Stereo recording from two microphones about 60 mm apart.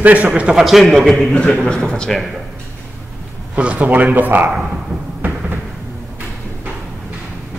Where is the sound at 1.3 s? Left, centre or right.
Centre.